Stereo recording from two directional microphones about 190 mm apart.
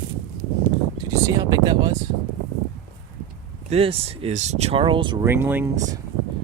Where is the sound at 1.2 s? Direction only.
20° right (ahead or behind).